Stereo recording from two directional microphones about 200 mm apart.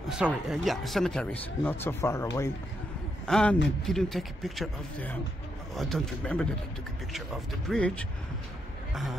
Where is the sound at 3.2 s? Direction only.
5° left (ahead or behind).